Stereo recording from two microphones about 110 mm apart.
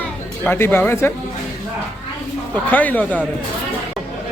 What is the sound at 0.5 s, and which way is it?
Speech, 20° left (ahead or behind).